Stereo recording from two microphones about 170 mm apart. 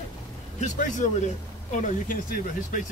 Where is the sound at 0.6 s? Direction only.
45° left (ahead or behind).